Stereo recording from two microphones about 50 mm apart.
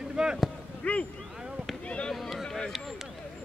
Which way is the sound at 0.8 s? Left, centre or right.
Left.